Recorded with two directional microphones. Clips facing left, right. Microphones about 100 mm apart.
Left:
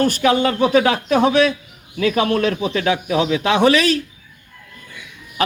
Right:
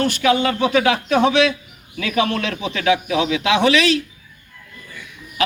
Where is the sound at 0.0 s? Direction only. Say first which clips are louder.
Left 1 dB; 35° left (ahead or behind).